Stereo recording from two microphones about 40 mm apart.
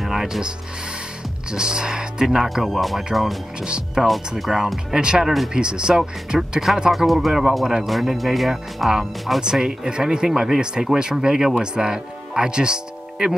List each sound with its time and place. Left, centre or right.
0.0 s music: centre
1.5 s speech: centre
3.6 s speech: centre
4.4 s speech: centre
6.9 s speech: centre
9.4 s speech: centre